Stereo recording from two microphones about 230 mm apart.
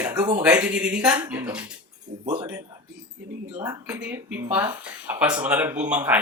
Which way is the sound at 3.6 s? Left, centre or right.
Centre.